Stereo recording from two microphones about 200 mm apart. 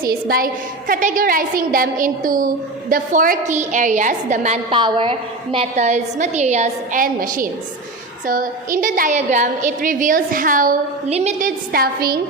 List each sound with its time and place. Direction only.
0.0 s a woman's voice: 50° right (ahead or behind)